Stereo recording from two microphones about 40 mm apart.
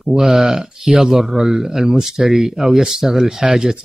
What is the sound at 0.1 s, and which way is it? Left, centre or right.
Speech, centre.